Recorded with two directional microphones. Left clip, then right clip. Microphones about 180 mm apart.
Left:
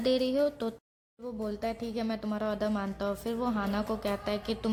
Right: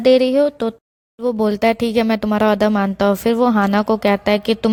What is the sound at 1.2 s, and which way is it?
Speech, 50° right (ahead or behind).